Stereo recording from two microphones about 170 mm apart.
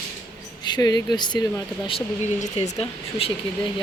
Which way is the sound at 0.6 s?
25° left (ahead or behind).